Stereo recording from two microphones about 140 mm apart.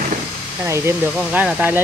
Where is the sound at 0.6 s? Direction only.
20° right (ahead or behind).